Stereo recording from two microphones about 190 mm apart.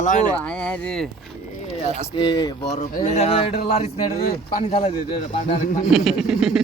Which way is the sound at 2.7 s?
35° left (ahead or behind).